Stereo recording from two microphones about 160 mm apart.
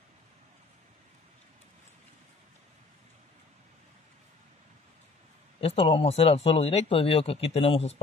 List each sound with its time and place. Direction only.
5.6 s speech: 35° left (ahead or behind)